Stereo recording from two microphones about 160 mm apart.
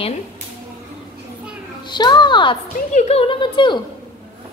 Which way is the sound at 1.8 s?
30° left (ahead or behind).